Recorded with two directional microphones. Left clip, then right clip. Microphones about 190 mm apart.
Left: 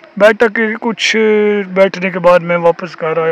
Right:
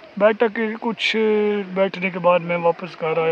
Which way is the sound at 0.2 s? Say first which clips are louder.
Left 8 dB; 25° left (ahead or behind).